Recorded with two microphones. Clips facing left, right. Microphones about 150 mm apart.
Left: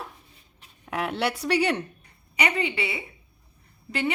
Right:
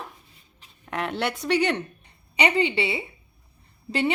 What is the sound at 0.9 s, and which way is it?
Speech, 5° left (ahead or behind).